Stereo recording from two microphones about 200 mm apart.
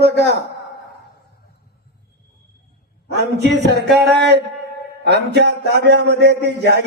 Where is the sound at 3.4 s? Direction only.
55° right (ahead or behind).